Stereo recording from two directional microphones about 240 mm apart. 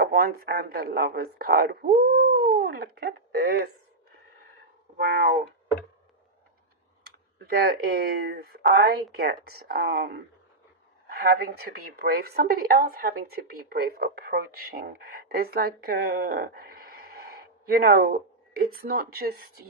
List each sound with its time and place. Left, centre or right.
0.0 s speech: right
4.9 s speech: right
7.0 s speech: right